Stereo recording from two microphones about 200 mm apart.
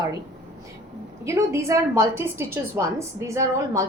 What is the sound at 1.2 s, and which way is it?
A woman's voice, 15° right (ahead or behind).